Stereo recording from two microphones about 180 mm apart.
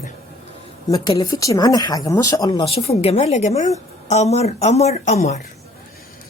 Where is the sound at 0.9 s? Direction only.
20° left (ahead or behind).